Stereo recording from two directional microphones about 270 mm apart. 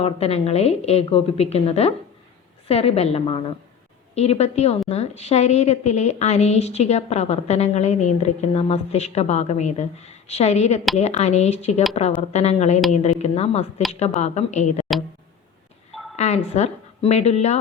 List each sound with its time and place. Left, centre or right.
0.0 s a woman's voice: left
16.1 s a woman's voice: left